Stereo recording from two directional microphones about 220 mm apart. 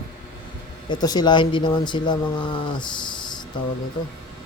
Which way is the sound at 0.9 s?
20° left (ahead or behind).